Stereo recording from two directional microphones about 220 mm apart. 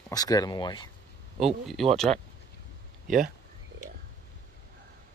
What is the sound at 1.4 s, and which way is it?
Speech, centre (ahead or behind).